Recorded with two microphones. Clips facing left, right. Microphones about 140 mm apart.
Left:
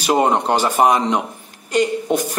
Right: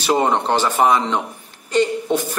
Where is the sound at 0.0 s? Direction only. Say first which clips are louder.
Left 1 dB; 10° left (ahead or behind).